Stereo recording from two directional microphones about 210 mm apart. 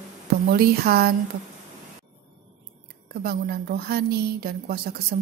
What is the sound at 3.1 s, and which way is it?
A woman's voice, 50° right (ahead or behind).